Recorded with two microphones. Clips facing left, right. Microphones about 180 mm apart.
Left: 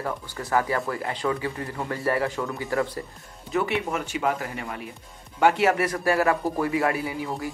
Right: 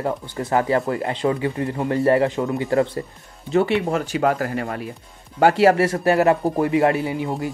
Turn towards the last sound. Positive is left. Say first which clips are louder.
# right 5 dB
turn(degrees=-25)  # may be behind; listen again after turning